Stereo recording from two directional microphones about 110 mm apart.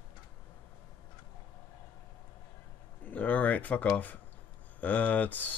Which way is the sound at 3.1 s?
15° left (ahead or behind).